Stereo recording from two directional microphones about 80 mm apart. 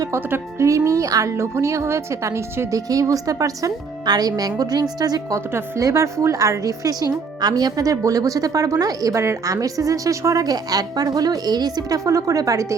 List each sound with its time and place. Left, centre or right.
0.1 s speech: right
0.9 s a woman's voice: right
5.3 s a woman's voice: right